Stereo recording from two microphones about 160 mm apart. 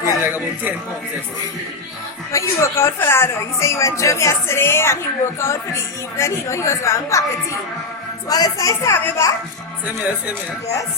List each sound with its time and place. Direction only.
0.2 s a man's voice: 10° right (ahead or behind)
2.3 s a woman's voice: 20° left (ahead or behind)
8.3 s a woman's voice: 25° left (ahead or behind)